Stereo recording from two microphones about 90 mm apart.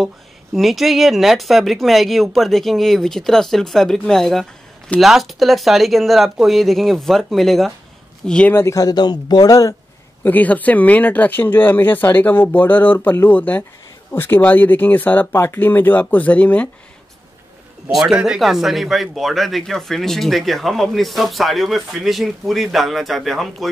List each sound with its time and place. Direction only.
0.6 s speech: centre (ahead or behind)
8.5 s speech: 25° left (ahead or behind)
8.7 s speech: 50° left (ahead or behind)
10.2 s speech: 20° left (ahead or behind)
17.9 s speech: 5° right (ahead or behind)